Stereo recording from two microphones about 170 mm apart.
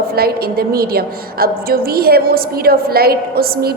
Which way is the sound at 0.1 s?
65° right (ahead or behind).